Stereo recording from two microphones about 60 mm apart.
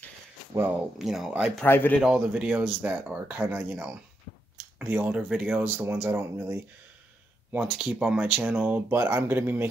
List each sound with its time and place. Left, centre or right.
0.7 s speech: centre
1.7 s speech: left
2.0 s speech: centre
2.8 s speech: right
5.6 s speech: right
7.6 s speech: centre
8.8 s speech: right